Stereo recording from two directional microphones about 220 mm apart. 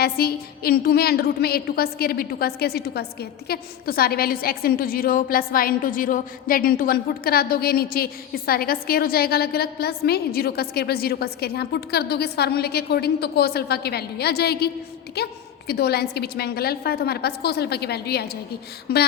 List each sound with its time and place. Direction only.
0.0 s a woman's voice: 45° left (ahead or behind)